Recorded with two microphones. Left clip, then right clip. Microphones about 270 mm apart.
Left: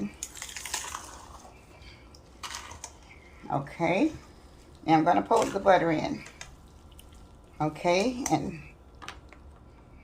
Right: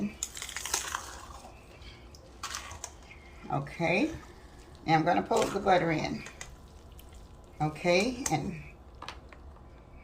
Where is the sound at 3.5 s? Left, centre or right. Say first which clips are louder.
Left 2 dB; centre.